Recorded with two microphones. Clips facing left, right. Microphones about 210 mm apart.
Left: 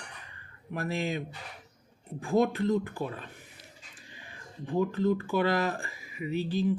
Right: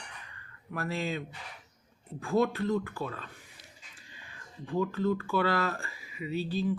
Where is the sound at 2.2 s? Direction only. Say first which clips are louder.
Left 2 dB; 15° left (ahead or behind).